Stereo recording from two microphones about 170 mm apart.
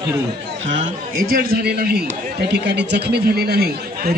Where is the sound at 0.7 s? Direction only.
55° right (ahead or behind).